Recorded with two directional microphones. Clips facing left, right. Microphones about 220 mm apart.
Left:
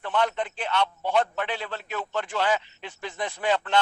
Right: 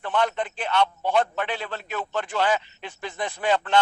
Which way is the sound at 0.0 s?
50° right (ahead or behind).